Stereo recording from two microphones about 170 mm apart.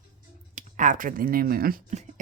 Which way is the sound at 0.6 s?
50° right (ahead or behind).